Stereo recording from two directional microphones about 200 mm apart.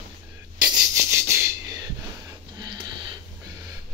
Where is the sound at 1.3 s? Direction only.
15° right (ahead or behind).